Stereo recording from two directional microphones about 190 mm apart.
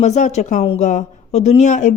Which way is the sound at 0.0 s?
35° left (ahead or behind).